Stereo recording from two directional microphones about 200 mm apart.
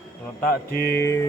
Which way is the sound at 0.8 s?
15° left (ahead or behind).